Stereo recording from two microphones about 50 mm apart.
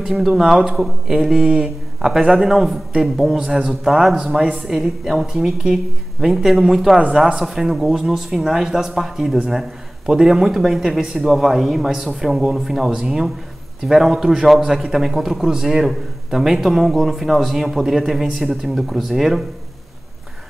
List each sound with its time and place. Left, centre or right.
0.0 s a man's voice: centre
9.5 s a sound: centre
10.1 s a man's voice: centre
10.4 s a man's voice: centre